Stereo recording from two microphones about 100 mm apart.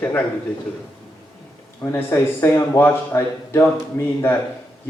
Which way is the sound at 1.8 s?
25° left (ahead or behind).